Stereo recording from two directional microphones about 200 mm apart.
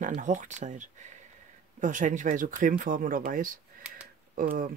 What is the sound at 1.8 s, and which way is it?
Speech, 40° right (ahead or behind).